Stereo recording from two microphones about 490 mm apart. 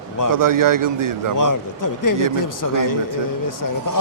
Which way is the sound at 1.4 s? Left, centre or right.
Left.